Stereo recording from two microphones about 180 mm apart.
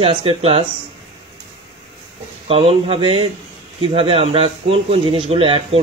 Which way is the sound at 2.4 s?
35° right (ahead or behind).